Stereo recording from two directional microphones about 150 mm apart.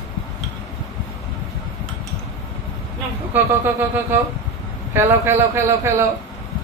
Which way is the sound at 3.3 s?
15° right (ahead or behind).